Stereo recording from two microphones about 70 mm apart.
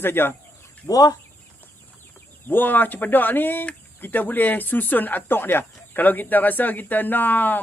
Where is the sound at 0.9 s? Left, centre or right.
Left.